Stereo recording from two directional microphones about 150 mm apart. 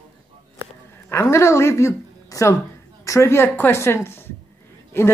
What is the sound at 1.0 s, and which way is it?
A woman's voice, 15° left (ahead or behind).